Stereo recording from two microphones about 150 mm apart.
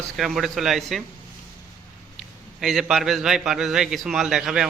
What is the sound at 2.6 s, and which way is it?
A man's voice, 5° right (ahead or behind).